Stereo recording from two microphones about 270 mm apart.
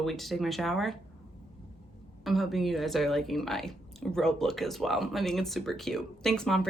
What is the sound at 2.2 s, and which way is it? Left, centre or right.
Speech, centre.